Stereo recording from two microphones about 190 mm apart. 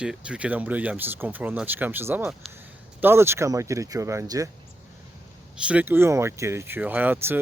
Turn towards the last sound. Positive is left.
turn(degrees=-10)  # may be behind; listen again after turning